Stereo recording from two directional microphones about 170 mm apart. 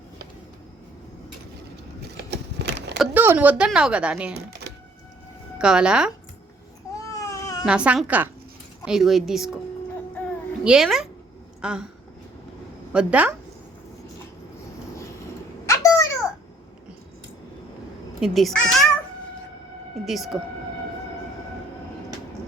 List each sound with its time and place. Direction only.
2.0 s a sound: 80° right
3.0 s speech: 10° right (ahead or behind)
5.5 s speech: 5° right (ahead or behind)
7.1 s baby cry: 20° left (ahead or behind)
7.6 s speech: 5° right (ahead or behind)
10.6 s speech: 5° right (ahead or behind)
12.9 s speech: 5° right (ahead or behind)
15.6 s a sound: 20° left (ahead or behind)
18.2 s speech: centre (ahead or behind)
20.1 s speech: centre (ahead or behind)